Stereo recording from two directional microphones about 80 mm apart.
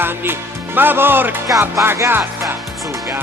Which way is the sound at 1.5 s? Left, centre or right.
Right.